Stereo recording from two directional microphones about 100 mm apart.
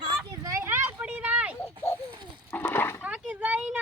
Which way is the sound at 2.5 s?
20° left (ahead or behind).